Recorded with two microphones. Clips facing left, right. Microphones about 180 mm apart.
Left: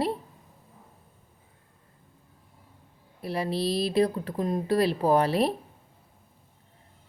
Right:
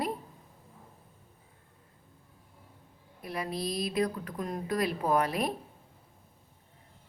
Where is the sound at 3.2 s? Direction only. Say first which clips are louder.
Left 6 dB; 30° left (ahead or behind).